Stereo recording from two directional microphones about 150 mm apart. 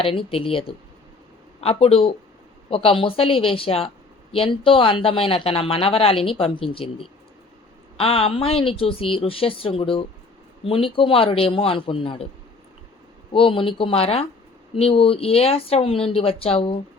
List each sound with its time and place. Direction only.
0.0 s speech: 35° left (ahead or behind)
1.6 s speech: 40° left (ahead or behind)
13.3 s speech: 35° left (ahead or behind)